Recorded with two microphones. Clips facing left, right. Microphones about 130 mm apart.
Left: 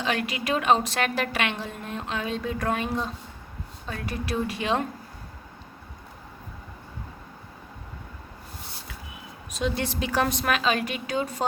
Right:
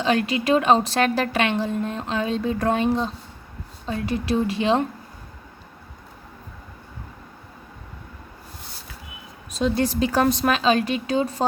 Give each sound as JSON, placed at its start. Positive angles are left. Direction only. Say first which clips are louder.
{"t": 0.0, "sound": "a woman's voice", "louder": "right 7 dB", "side_deg": -30}
{"t": 9.5, "sound": "a woman's voice", "louder": "right 6 dB", "side_deg": -35}